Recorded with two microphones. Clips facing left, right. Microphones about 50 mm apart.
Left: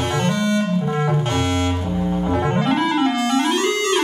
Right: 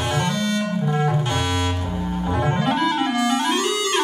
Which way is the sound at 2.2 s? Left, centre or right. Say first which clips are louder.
Even; centre.